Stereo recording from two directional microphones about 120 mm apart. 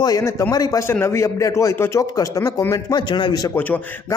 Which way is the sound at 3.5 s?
15° left (ahead or behind).